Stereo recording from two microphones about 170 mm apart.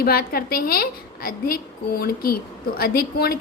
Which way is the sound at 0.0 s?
65° left (ahead or behind).